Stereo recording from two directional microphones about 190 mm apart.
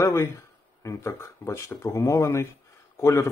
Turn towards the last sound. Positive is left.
turn(degrees=15)  # may be behind; listen again after turning